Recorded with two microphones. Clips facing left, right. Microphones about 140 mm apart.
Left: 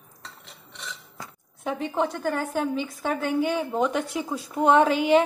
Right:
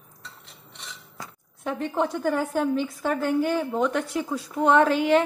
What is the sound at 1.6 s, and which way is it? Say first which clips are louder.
Speech: even; 10° left (ahead or behind).